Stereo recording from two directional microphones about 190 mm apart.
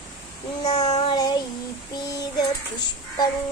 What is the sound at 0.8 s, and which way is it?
Child singing, 35° left (ahead or behind).